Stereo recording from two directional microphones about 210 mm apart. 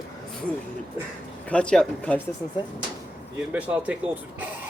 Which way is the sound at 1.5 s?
5° left (ahead or behind).